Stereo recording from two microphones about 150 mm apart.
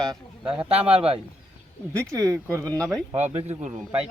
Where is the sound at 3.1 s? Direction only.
45° right (ahead or behind).